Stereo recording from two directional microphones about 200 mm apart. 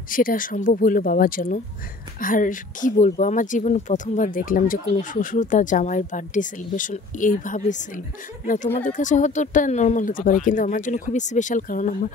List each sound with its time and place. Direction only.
0.1 s speech: 45° left (ahead or behind)
8.7 s speech: 40° left (ahead or behind)